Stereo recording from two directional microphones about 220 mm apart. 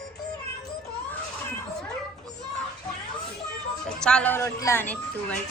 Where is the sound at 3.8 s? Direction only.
5° left (ahead or behind).